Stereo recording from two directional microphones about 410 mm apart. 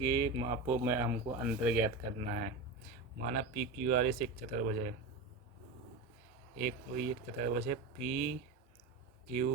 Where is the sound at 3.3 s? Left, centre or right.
Centre.